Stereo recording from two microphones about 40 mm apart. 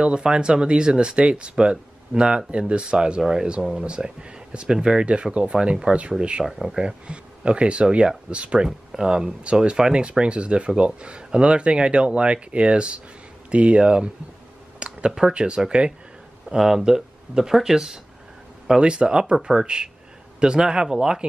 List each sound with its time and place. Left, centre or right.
0.0 s speech: right
6.4 s speech: centre
6.8 s speech: right
8.6 s speech: centre
14.8 s a sound: right
15.3 s speech: right
16.5 s speech: centre
18.8 s speech: right